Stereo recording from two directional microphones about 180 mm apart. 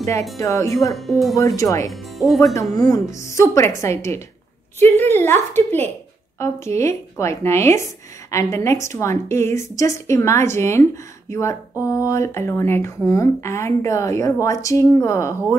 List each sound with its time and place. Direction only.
0.4 s a woman's voice: 15° left (ahead or behind)
0.9 s speech: centre (ahead or behind)
1.3 s a woman's voice: 20° left (ahead or behind)
1.9 s speech: centre (ahead or behind)
2.9 s a woman's voice: 15° left (ahead or behind)